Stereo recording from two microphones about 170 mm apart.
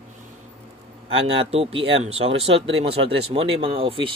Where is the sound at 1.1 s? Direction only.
35° right (ahead or behind).